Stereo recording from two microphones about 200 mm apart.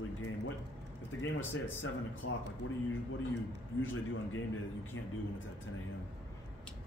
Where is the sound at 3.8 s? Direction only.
80° left.